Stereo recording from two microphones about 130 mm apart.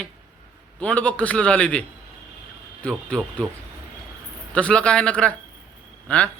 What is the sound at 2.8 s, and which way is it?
Speech, 10° left (ahead or behind).